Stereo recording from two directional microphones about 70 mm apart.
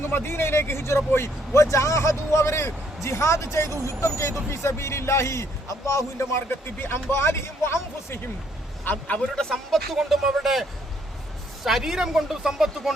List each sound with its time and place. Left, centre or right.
0.0 s speech: left
8.9 s a man's voice: left
9.4 s speech: centre